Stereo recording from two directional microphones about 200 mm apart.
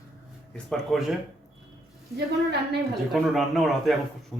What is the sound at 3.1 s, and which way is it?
A man's voice, centre (ahead or behind).